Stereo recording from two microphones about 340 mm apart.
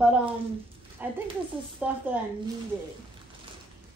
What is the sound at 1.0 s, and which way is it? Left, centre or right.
Speech, centre.